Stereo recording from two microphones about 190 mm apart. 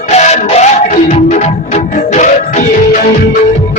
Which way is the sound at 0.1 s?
35° left (ahead or behind).